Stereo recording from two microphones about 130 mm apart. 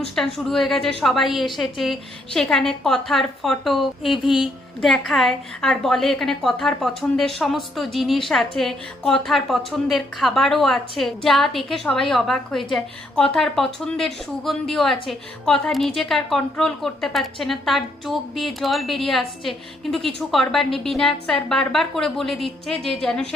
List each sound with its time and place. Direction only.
0.2 s a woman's voice: centre (ahead or behind)